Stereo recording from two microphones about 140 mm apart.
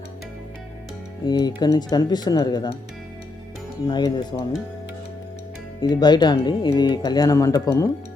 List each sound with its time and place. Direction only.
1.3 s speech: 30° left (ahead or behind)
3.8 s speech: 30° left (ahead or behind)
5.8 s speech: 30° left (ahead or behind)